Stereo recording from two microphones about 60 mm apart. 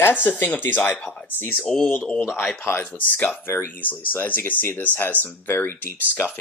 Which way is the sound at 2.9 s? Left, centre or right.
Left.